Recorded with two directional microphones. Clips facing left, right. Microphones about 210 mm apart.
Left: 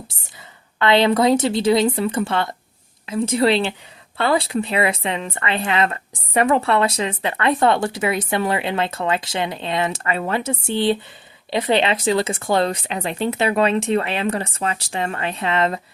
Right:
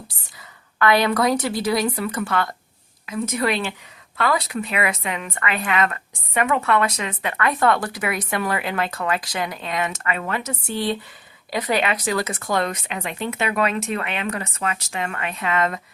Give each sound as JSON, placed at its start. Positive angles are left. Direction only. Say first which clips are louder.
{"t": 0.1, "sound": "speech", "louder": "left 2 dB", "side_deg": 25}